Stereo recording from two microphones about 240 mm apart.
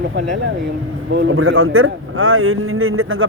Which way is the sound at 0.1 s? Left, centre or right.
Right.